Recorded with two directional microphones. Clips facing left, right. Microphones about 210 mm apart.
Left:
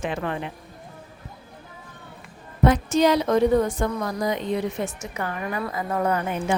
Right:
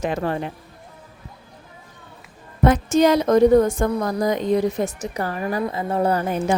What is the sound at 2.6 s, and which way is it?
A woman's voice, 45° right (ahead or behind).